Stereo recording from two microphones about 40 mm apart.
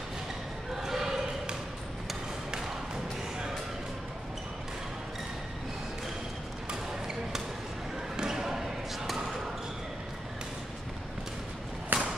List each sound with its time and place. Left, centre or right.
0.7 s basketball bounce: centre
6.9 s basketball bounce: centre
11.9 s a sound: right